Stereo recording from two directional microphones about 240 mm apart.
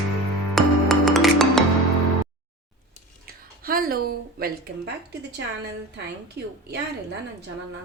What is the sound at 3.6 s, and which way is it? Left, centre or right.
A woman's voice, right.